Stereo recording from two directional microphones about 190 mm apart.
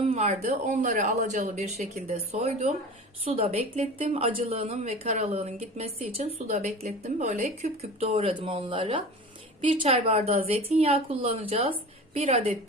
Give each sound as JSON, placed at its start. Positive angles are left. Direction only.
{"t": 0.0, "sound": "speech", "side_deg": -35}